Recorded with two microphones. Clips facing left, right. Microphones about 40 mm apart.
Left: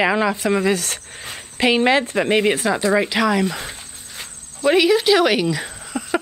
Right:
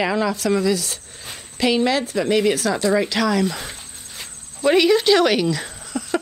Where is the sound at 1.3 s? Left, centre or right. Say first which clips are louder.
Left 2 dB; left.